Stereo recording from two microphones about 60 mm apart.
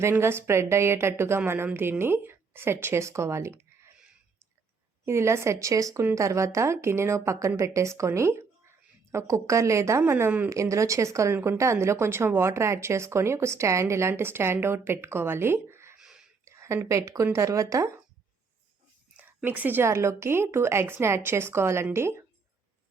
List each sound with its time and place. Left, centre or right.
0.0 s a woman's voice: right
5.0 s a woman's voice: right
10.1 s a woman's voice: right
10.5 s a woman's voice: right
11.3 s a woman's voice: right
16.0 s whispering: centre
16.5 s a sound: right
16.9 s a woman's voice: right
19.1 s a sound: right
19.8 s a woman's voice: right